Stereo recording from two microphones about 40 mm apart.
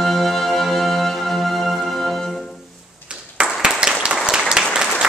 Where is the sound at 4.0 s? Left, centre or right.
Right.